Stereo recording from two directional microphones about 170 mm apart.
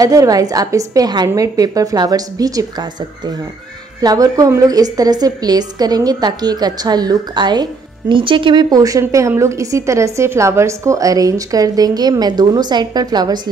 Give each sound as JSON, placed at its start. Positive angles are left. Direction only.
{"t": 0.0, "sound": "a woman's voice", "side_deg": -20}
{"t": 4.0, "sound": "a woman's voice", "side_deg": -20}